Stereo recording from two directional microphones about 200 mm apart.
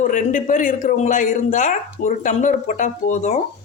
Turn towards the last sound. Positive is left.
turn(degrees=35)  # may be behind; listen again after turning